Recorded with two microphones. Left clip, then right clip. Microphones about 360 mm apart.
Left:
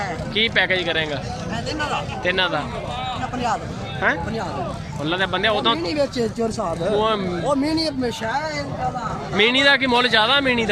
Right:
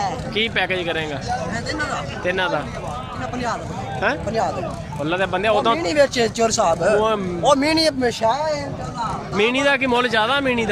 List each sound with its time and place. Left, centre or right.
0.0 s a man's voice: centre
4.0 s a man's voice: centre
5.8 s speech: centre
9.3 s a man's voice: centre